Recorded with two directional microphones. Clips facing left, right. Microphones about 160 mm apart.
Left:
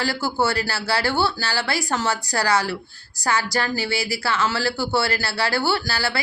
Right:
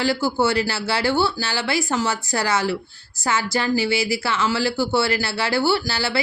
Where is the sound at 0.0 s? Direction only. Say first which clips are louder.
Right 3 dB; 20° right (ahead or behind).